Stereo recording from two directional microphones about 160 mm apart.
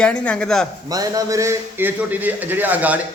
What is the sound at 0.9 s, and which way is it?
A man's voice, 20° right (ahead or behind).